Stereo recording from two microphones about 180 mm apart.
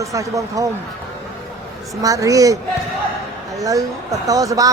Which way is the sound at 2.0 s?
20° right (ahead or behind).